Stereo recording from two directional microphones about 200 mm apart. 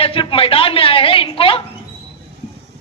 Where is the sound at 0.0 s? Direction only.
25° left (ahead or behind).